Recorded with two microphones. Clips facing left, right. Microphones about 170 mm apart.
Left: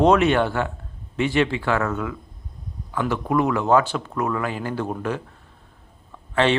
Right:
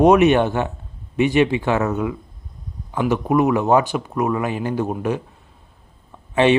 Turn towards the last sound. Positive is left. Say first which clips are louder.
# right 5 dB
turn(degrees=-15)  # may be behind; listen again after turning